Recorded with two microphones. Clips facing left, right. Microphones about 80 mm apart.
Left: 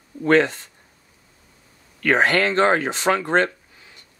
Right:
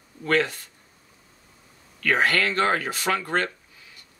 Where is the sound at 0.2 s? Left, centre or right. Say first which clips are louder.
Left 6 dB; left.